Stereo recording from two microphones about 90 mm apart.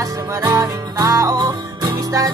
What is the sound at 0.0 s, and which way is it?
Music, 40° right (ahead or behind).